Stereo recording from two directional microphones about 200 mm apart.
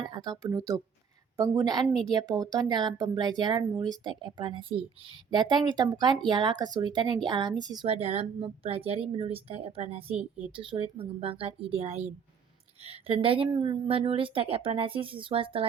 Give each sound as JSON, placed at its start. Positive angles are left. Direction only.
{"t": 0.1, "sound": "a woman's voice", "side_deg": -20}